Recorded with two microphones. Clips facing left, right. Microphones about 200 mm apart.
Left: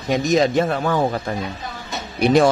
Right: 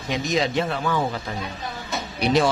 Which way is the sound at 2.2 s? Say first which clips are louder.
Left 5 dB; 50° left (ahead or behind).